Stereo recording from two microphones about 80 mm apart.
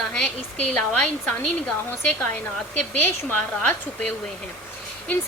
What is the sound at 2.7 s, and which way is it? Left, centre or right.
Speech, left.